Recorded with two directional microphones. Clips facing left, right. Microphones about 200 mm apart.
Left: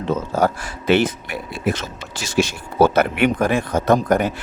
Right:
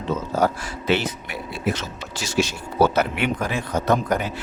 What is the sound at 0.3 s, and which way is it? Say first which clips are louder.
Speech: even; 50° left (ahead or behind).